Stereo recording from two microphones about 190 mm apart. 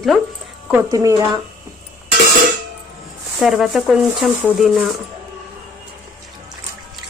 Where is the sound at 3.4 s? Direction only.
Centre (ahead or behind).